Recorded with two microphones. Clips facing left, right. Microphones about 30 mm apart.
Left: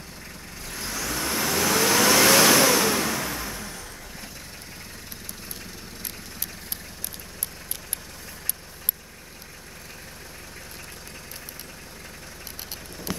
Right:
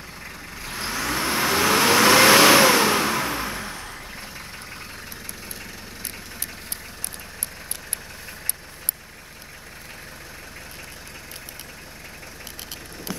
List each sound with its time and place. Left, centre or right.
0.7 s vehicle: right